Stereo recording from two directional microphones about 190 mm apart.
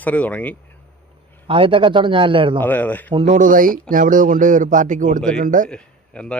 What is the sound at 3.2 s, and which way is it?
Speech, 40° right (ahead or behind).